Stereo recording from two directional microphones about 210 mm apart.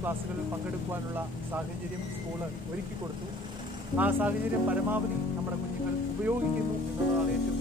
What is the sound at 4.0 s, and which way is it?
Speech, 10° right (ahead or behind).